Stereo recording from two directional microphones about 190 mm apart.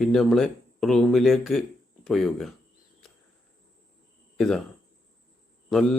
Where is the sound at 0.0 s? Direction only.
Centre (ahead or behind).